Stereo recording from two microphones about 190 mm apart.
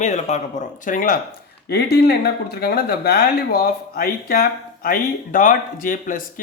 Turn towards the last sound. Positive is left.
turn(degrees=45)  # may be behind; listen again after turning